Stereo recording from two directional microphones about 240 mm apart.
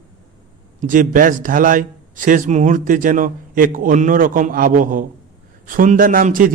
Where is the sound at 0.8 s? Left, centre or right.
Right.